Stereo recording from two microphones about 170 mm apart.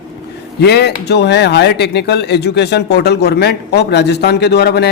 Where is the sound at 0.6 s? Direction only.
75° left (ahead or behind).